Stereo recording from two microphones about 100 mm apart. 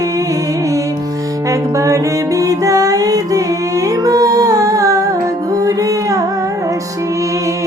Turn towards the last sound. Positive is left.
turn(degrees=-35)  # may be behind; listen again after turning